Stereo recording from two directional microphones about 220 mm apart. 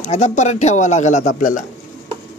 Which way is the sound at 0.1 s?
30° left (ahead or behind).